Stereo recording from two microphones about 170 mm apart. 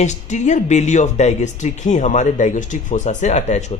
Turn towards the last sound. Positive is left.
turn(degrees=40)  # may be behind; listen again after turning